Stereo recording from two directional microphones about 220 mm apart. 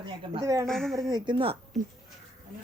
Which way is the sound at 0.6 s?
Centre (ahead or behind).